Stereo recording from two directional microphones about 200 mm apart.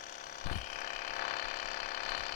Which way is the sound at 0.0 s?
40° left (ahead or behind).